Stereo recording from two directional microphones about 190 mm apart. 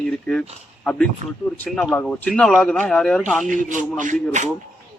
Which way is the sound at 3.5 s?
40° right (ahead or behind).